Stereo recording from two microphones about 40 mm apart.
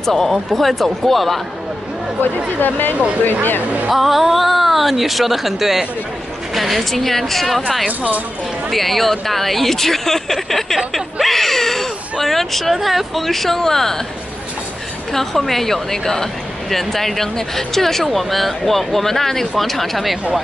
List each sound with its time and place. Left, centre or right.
0.0 s speech: centre
2.5 s speech: left
3.9 s speech: centre
8.6 s speech: centre
15.1 s speech: centre